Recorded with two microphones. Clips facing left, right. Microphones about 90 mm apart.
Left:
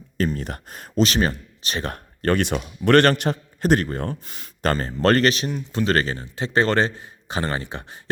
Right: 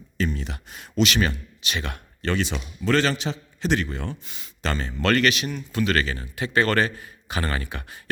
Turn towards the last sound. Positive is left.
turn(degrees=25)  # may be behind; listen again after turning